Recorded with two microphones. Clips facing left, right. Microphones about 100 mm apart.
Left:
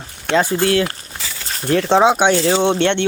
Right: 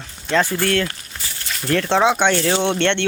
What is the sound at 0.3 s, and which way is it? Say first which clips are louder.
Speech: left 3 dB; 15° left (ahead or behind).